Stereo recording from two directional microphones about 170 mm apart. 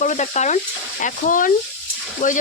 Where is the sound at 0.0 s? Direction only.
45° left (ahead or behind).